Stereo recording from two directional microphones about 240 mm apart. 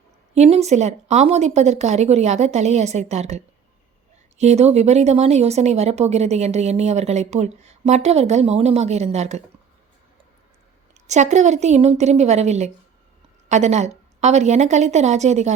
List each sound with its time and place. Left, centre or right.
0.3 s speech: right
10.9 s speech: right